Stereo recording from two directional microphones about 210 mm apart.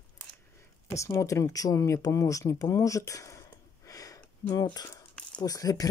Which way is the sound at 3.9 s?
15° left (ahead or behind).